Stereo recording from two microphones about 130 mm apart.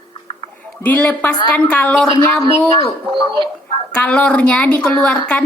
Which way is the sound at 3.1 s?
40° right (ahead or behind).